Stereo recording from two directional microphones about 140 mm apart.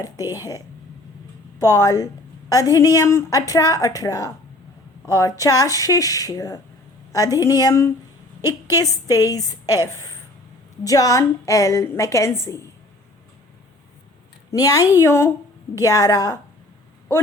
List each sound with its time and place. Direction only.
0.3 s a woman's voice: 25° left (ahead or behind)
1.6 s a woman's voice: 25° left (ahead or behind)
14.5 s a woman's voice: 25° left (ahead or behind)